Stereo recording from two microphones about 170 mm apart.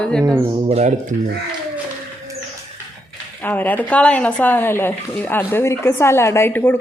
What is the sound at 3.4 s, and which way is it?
Speech, 10° left (ahead or behind).